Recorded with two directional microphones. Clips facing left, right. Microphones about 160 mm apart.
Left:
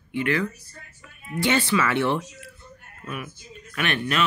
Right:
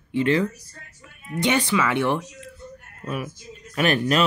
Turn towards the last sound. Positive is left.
turn(degrees=-40)  # may be behind; listen again after turning